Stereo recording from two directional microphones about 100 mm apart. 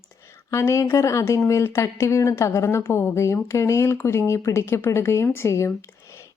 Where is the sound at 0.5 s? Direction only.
30° left (ahead or behind).